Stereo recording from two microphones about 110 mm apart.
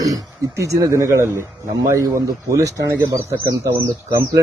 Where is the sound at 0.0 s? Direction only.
35° right (ahead or behind).